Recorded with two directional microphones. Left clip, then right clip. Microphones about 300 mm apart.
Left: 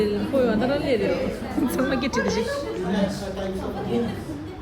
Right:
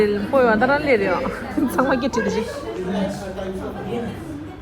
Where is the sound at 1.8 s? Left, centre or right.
Centre.